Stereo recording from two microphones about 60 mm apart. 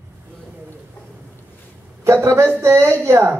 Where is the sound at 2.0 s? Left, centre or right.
Right.